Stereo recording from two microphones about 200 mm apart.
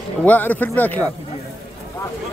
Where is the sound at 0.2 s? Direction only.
10° left (ahead or behind).